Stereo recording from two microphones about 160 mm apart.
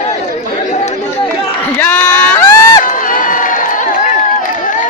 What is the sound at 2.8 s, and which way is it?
Crowd, 55° left (ahead or behind).